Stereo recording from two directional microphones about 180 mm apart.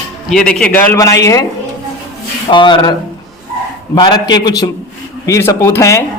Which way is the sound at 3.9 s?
25° left (ahead or behind).